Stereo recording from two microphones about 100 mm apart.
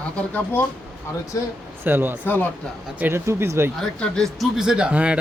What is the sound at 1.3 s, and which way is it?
Speech, 35° left (ahead or behind).